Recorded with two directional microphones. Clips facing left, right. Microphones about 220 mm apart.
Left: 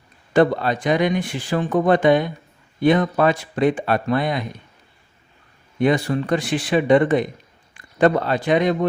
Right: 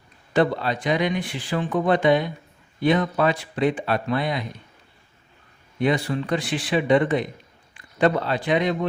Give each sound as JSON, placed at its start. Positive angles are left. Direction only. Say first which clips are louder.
{"t": 0.3, "sound": "speech", "louder": "left 4 dB", "side_deg": 50}
{"t": 5.8, "sound": "speech", "louder": "left 4 dB", "side_deg": 45}